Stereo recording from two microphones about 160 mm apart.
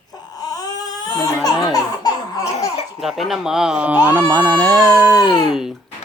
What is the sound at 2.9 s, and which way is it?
Speech, centre (ahead or behind).